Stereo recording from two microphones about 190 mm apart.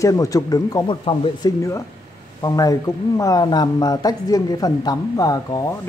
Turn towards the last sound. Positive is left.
turn(degrees=20)  # may be behind; listen again after turning